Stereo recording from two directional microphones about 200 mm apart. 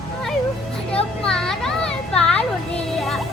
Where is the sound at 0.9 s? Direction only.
5° left (ahead or behind).